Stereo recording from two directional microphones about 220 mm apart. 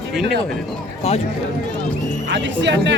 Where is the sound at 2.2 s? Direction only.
55° right (ahead or behind).